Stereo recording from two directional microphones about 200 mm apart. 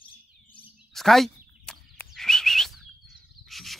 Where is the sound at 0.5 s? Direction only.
Centre (ahead or behind).